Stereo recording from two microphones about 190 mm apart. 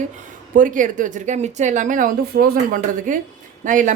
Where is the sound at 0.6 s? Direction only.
45° right (ahead or behind).